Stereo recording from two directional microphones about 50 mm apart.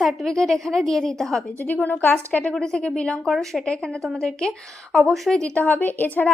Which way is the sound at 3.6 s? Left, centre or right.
Centre.